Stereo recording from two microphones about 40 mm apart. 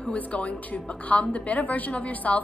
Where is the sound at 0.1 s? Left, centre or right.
Left.